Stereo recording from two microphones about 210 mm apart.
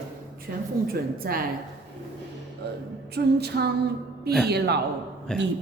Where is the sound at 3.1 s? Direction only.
50° right (ahead or behind).